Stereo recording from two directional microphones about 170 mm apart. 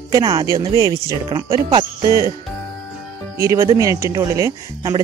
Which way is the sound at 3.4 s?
15° right (ahead or behind).